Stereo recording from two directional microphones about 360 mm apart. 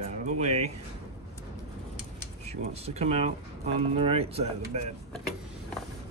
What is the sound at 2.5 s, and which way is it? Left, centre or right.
Speech, centre.